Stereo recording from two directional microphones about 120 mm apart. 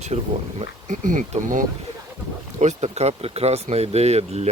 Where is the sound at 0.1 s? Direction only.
65° right (ahead or behind).